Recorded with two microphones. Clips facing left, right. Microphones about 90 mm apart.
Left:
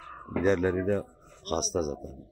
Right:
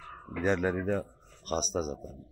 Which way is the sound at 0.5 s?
5° right (ahead or behind).